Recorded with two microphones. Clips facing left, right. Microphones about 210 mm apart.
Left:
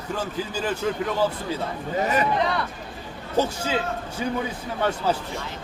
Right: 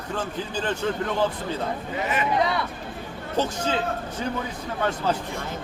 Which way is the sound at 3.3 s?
10° left (ahead or behind).